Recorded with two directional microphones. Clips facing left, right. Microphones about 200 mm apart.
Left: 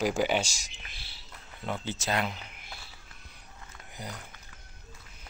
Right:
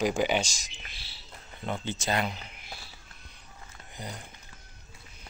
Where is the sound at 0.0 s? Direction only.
5° left (ahead or behind).